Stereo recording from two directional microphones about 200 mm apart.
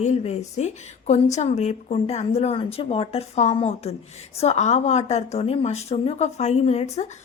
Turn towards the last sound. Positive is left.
turn(degrees=30)  # may be behind; listen again after turning